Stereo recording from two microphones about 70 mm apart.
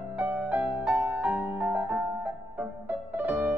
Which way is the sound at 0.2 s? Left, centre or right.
Right.